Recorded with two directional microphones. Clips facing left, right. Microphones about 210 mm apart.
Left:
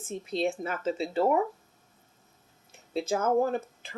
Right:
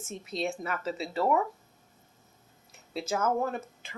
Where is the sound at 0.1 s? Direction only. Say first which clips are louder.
Left 4 dB; 30° left (ahead or behind).